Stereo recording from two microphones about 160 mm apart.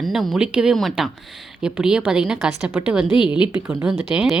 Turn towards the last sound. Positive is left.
turn(degrees=0)  # may be behind; listen again after turning